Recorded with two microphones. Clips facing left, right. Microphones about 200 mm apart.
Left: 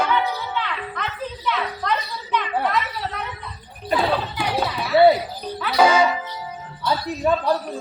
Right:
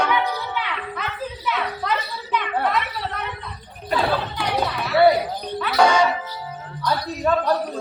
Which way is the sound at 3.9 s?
5° left (ahead or behind).